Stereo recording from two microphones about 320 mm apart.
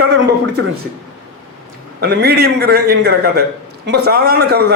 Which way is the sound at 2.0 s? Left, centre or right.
Right.